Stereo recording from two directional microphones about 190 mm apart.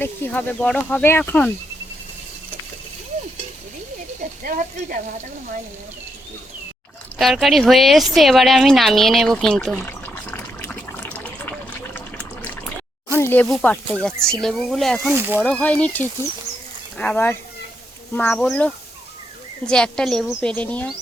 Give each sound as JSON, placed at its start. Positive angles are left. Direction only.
{"t": 0.0, "sound": "speech", "side_deg": 10}
{"t": 4.4, "sound": "speech", "side_deg": -45}
{"t": 7.2, "sound": "a woman's voice", "side_deg": 0}
{"t": 10.3, "sound": "water", "side_deg": 10}
{"t": 13.1, "sound": "a woman's voice", "side_deg": 10}
{"t": 15.1, "sound": "speech", "side_deg": -10}
{"t": 15.4, "sound": "a woman's voice", "side_deg": 5}